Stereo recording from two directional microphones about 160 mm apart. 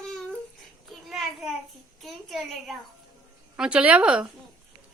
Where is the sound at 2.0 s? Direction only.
Centre (ahead or behind).